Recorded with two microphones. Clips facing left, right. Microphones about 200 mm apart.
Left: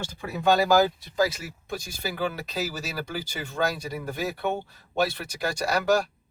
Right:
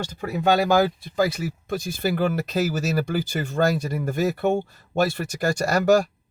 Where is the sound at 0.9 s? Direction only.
55° right (ahead or behind).